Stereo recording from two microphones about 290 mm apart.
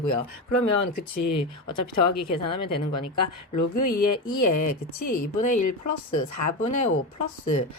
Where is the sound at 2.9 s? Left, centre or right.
Left.